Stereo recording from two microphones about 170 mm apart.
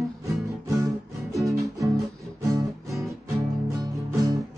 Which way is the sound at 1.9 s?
Centre (ahead or behind).